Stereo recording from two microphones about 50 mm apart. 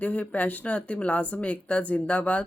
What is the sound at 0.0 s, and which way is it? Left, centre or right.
A woman's voice, left.